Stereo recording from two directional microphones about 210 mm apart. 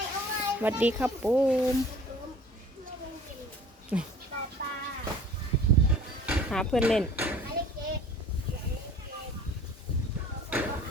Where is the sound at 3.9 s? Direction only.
5° right (ahead or behind).